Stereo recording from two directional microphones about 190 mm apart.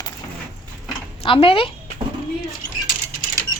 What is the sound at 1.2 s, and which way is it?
Speech, 30° left (ahead or behind).